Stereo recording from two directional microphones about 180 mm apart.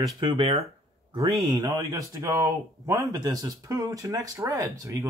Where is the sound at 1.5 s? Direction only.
20° right (ahead or behind).